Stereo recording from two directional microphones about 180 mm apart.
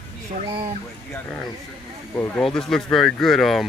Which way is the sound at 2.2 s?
5° left (ahead or behind).